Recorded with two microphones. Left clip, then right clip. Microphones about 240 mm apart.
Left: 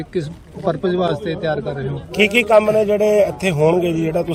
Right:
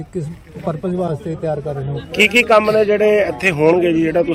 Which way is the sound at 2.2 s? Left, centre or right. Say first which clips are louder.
Right 1 dB; left.